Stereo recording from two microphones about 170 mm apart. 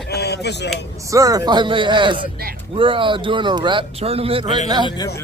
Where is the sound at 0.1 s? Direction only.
75° left (ahead or behind).